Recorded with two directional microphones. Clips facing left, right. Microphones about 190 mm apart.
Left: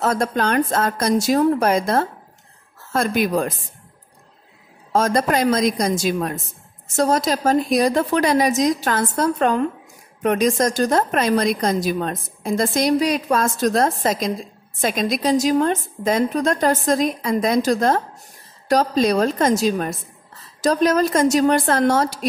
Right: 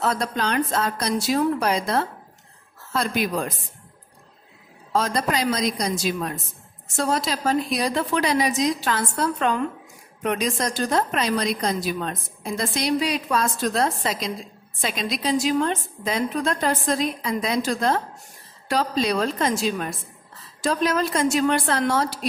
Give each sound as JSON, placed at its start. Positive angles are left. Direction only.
{"t": 0.0, "sound": "speech", "side_deg": 45}
{"t": 4.9, "sound": "speech", "side_deg": 50}